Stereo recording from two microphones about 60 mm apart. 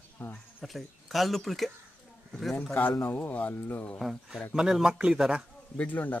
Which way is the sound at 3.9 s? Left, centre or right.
Centre.